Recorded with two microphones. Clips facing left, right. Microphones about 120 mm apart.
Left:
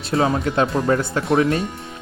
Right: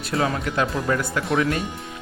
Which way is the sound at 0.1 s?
30° left (ahead or behind).